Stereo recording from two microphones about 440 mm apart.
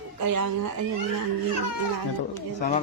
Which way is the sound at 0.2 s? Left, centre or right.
Right.